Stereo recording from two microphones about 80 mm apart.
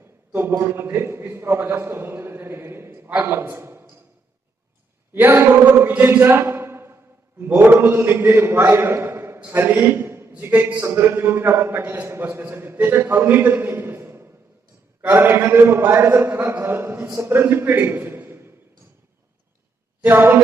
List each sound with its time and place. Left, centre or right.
0.0 s a sound: right
0.6 s a man's voice: right
5.1 s a man's voice: right
20.0 s a man's voice: right